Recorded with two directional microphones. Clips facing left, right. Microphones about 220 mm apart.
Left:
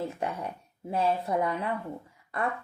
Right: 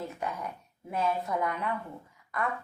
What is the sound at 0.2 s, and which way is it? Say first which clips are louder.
Speech: left 3 dB; 30° left (ahead or behind).